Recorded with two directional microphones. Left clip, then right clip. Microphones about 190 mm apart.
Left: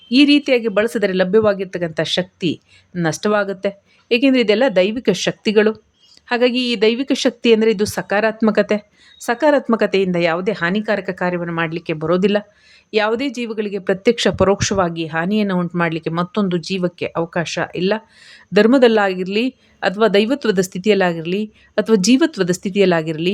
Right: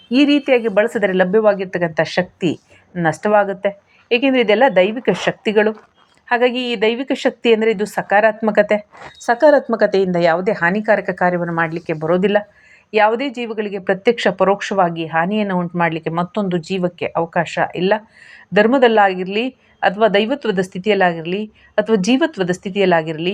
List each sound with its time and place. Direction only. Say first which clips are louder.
0.1 s a woman's voice: left 1 dB; 45° left (ahead or behind)
0.4 s a woman's voice: right 2 dB; 30° left (ahead or behind)